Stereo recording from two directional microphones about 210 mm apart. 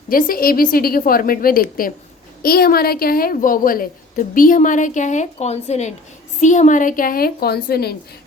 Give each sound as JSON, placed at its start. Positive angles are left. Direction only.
{"t": 0.1, "sound": "a woman's voice", "side_deg": 40}